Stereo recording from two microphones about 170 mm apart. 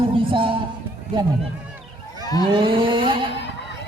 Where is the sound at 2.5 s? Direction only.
30° right (ahead or behind).